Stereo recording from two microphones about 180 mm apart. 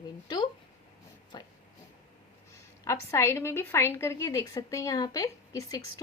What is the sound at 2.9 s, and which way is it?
A woman's voice, 15° left (ahead or behind).